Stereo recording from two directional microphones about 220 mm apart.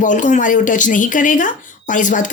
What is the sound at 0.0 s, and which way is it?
A woman's voice, 35° left (ahead or behind).